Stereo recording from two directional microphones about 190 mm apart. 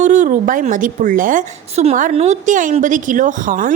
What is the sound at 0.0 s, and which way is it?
A woman's voice, 40° right (ahead or behind).